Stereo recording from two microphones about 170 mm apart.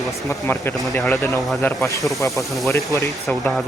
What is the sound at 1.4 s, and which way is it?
Speech, centre (ahead or behind).